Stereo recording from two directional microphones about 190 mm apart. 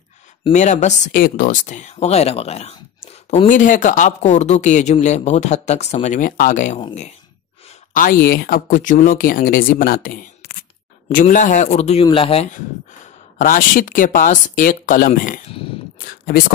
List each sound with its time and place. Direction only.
0.5 s speech: 40° left (ahead or behind)
7.9 s speech: 50° left (ahead or behind); by 12.4 s 30° left (ahead or behind)
13.4 s speech: 45° left (ahead or behind)
16.0 s a sound: 50° left (ahead or behind)